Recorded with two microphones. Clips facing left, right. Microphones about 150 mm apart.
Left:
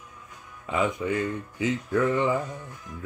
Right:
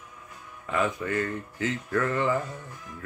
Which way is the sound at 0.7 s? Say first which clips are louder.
Left 2 dB; 15° left (ahead or behind).